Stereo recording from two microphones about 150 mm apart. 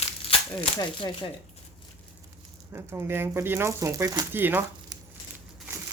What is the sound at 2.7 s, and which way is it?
Speech, 15° right (ahead or behind).